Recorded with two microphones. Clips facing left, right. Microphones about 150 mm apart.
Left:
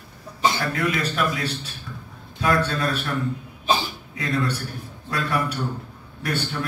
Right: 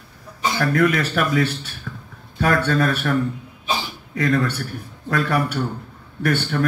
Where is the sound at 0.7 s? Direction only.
60° right (ahead or behind).